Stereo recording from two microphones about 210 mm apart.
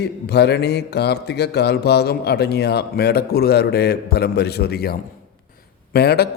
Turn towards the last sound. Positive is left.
turn(degrees=50)  # may be behind; listen again after turning